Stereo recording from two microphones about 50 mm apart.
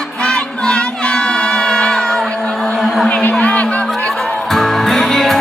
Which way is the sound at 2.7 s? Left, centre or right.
Centre.